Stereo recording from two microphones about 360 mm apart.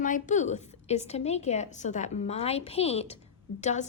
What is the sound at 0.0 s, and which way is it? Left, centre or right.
A woman's voice, left.